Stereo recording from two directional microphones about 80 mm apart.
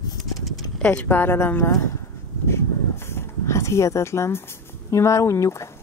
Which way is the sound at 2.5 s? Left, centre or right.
Left.